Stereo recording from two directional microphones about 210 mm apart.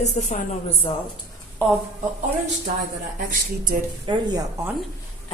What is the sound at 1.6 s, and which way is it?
Speech, 10° left (ahead or behind).